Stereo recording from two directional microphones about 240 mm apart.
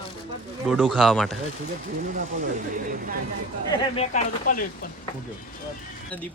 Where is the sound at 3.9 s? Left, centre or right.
Left.